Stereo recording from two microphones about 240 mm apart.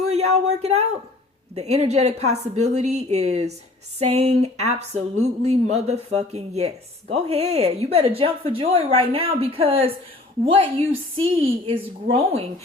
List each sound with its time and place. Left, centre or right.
0.1 s speech: right